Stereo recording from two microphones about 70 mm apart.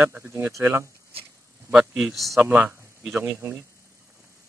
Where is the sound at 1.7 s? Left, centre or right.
Centre.